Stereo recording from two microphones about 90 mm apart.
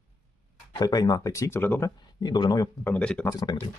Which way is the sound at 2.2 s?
50° left (ahead or behind).